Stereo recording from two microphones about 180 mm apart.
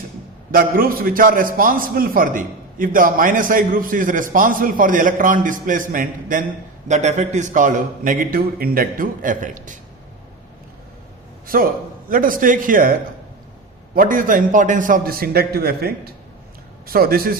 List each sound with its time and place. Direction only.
0.5 s a man's voice: 50° right (ahead or behind)
11.4 s a man's voice: 50° right (ahead or behind)